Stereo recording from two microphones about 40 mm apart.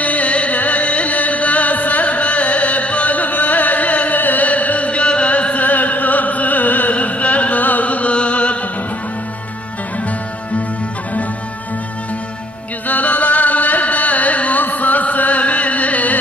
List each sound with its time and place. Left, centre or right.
0.0 s music: left
12.8 s music: left